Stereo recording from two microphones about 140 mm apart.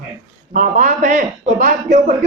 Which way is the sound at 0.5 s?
60° right (ahead or behind).